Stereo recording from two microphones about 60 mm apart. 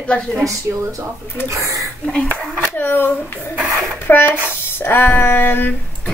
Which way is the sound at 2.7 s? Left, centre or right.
Left.